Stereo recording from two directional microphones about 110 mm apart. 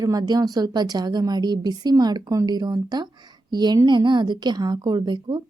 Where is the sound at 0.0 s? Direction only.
35° right (ahead or behind).